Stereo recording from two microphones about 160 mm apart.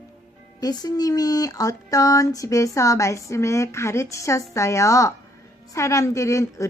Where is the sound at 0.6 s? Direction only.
25° left (ahead or behind).